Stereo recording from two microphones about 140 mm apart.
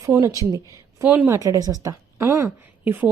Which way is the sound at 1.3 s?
25° right (ahead or behind).